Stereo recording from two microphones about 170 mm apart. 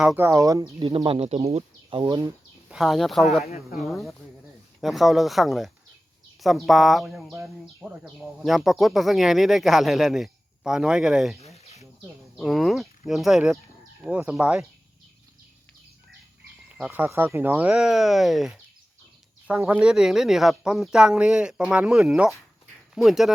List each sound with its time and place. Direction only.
0.0 s speech: 10° right (ahead or behind)
2.6 s speech: centre (ahead or behind)
11.3 s insect: 40° left (ahead or behind)
12.4 s speech: centre (ahead or behind)
16.7 s speech: 10° right (ahead or behind)